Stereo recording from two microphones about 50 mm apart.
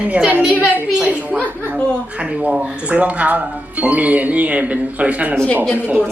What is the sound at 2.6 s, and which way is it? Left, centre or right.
A man's voice, right.